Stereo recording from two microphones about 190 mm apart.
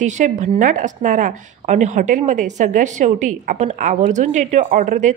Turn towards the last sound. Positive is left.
turn(degrees=-40)  # may be behind; listen again after turning